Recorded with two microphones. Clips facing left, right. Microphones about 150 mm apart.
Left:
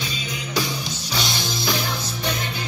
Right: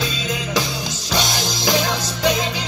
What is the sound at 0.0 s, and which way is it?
Music, 90° right.